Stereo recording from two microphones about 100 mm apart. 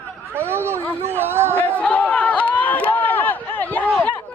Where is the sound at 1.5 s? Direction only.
15° left (ahead or behind).